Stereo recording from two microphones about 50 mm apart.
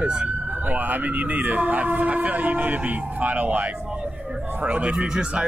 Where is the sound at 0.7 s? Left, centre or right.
Right.